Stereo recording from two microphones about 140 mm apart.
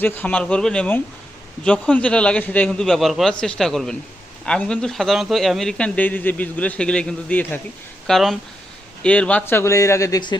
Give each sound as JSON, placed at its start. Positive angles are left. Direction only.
{"t": 0.0, "sound": "a man's voice", "side_deg": 15}